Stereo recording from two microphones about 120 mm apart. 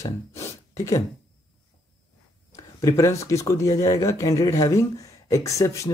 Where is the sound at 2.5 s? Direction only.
30° left (ahead or behind).